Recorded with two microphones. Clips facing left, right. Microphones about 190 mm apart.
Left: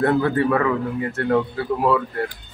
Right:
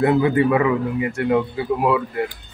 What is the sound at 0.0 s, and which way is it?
A man's voice, 10° right (ahead or behind).